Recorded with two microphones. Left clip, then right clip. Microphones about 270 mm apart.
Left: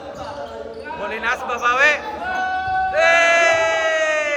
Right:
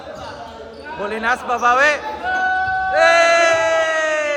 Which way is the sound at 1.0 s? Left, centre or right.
Centre.